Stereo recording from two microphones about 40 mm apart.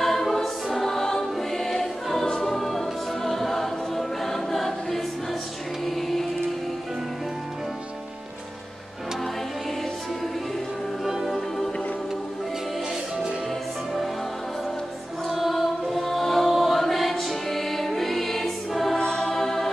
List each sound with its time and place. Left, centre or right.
0.0 s choir: centre
2.4 s music: centre
11.1 s music: centre
15.2 s choir: centre
18.9 s choir: centre
19.2 s music: centre